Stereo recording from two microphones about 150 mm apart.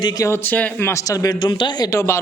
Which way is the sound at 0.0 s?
25° left (ahead or behind).